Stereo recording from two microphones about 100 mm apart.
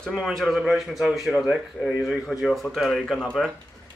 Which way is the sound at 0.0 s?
Centre (ahead or behind).